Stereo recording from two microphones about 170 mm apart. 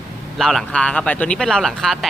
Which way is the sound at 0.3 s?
Centre (ahead or behind).